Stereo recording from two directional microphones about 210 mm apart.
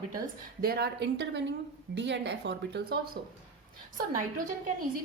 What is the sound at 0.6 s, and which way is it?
A woman's voice, 50° right (ahead or behind).